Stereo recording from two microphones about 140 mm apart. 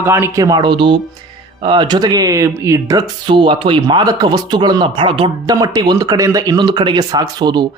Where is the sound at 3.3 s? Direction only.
35° right (ahead or behind).